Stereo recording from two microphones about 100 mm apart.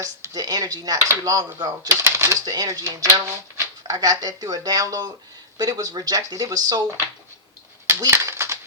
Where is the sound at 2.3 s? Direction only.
40° right (ahead or behind).